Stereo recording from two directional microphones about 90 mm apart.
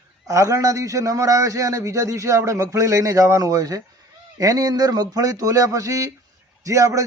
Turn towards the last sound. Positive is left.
turn(degrees=-35)  # may be behind; listen again after turning